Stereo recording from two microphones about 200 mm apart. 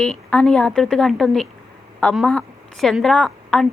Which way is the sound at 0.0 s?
5° left (ahead or behind).